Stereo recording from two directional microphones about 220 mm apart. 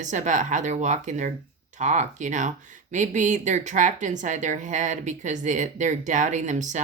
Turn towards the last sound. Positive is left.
turn(degrees=-35)  # may be behind; listen again after turning